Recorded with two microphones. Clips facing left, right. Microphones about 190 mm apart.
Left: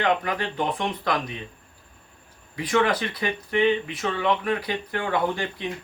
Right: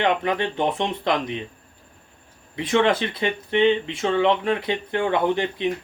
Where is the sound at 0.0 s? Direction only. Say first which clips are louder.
Right 3 dB; 25° right (ahead or behind).